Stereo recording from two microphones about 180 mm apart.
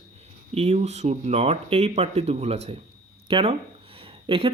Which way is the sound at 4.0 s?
30° right (ahead or behind).